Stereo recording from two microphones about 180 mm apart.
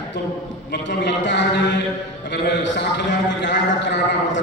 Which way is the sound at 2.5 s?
75° left (ahead or behind).